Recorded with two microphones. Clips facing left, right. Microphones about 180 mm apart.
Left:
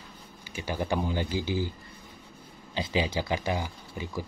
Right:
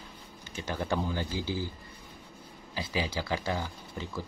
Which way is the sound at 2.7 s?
20° left (ahead or behind).